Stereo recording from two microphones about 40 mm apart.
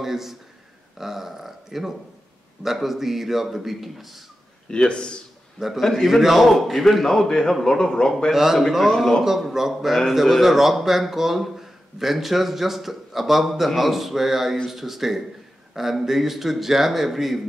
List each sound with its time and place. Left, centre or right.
0.0 s a man's voice: centre
4.6 s speech: left
5.8 s a man's voice: centre
8.3 s speech: centre
9.2 s a man's voice: centre